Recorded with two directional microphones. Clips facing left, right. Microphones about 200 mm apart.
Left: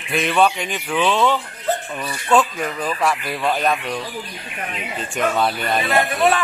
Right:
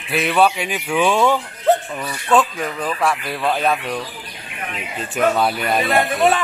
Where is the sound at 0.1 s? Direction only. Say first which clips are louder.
Right 1 dB; 5° right (ahead or behind).